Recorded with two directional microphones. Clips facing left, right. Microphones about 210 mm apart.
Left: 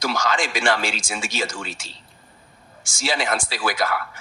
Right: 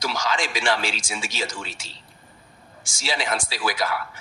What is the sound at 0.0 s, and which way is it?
A man's voice, 50° left (ahead or behind).